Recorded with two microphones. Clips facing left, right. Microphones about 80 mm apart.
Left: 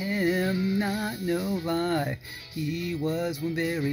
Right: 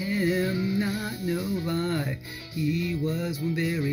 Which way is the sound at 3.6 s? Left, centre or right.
Left.